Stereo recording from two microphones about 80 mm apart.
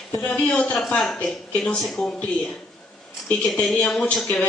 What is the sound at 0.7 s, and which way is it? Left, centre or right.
Speech, centre.